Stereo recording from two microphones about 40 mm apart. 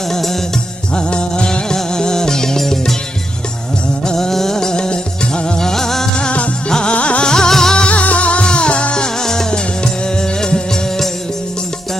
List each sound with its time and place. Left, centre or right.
0.1 s music: centre
0.9 s music: left
4.0 s music: centre
6.1 s music: left
6.7 s music: centre
6.9 s music: left
7.3 s music: centre
7.9 s music: left; by 11.0 s centre